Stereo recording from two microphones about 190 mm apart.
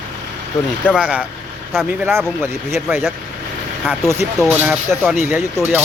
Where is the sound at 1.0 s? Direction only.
5° right (ahead or behind).